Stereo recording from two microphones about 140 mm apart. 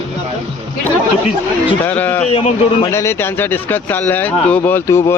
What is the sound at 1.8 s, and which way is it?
Speech, 15° left (ahead or behind).